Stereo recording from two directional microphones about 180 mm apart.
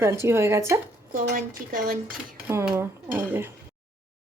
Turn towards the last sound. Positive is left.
turn(degrees=-10)  # may be behind; listen again after turning